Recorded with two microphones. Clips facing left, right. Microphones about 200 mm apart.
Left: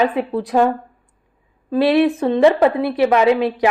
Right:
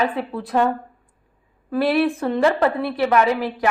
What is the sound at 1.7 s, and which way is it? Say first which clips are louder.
A woman's voice: left 4 dB; 20° left (ahead or behind).